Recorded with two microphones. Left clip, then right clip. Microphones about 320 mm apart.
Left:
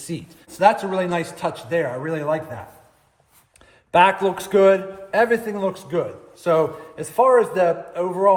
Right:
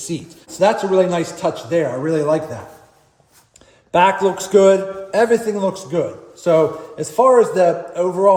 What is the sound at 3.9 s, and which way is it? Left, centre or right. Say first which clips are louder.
A man's voice: right 2 dB; left.